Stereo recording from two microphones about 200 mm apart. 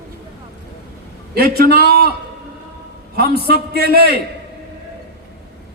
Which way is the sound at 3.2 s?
50° right (ahead or behind).